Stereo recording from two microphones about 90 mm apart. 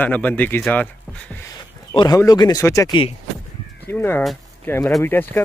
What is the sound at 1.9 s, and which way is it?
Speech, 50° left (ahead or behind).